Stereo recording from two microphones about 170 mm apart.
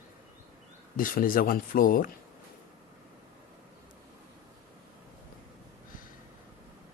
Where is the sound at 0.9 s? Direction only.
55° left (ahead or behind).